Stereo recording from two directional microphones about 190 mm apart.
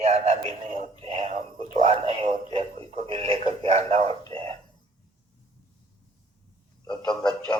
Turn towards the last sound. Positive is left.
turn(degrees=5)  # may be behind; listen again after turning